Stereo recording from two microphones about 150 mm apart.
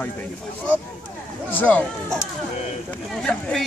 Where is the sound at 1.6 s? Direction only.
10° left (ahead or behind).